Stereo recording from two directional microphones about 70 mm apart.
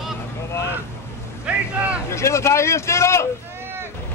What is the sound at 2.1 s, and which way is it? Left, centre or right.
Speech, left.